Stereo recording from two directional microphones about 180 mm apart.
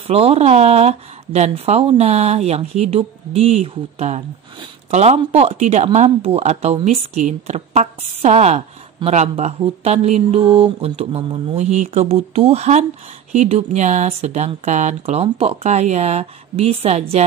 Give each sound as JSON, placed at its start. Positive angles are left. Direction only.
{"t": 0.0, "sound": "speech", "side_deg": -35}